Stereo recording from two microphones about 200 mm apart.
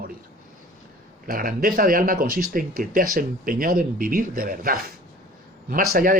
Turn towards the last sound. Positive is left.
turn(degrees=-45)  # may be behind; listen again after turning